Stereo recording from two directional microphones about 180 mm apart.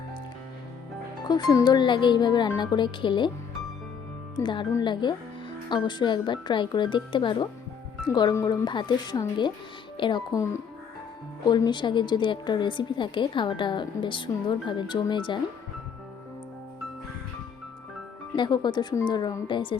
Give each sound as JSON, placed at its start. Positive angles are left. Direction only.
{"t": 1.2, "sound": "a woman's voice", "side_deg": 25}
{"t": 4.4, "sound": "a woman's voice", "side_deg": 25}
{"t": 18.3, "sound": "a woman's voice", "side_deg": 25}